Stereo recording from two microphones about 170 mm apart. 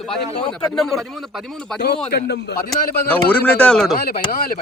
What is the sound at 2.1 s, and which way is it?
Speech, 70° left (ahead or behind).